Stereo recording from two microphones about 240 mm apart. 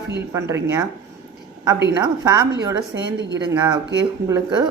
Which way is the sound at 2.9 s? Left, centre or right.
Right.